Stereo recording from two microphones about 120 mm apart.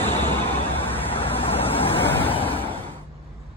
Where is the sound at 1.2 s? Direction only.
50° left (ahead or behind).